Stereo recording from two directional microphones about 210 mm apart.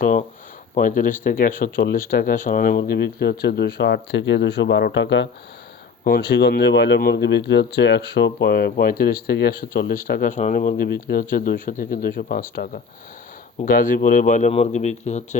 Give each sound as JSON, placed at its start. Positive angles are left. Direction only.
{"t": 0.0, "sound": "speech", "side_deg": 40}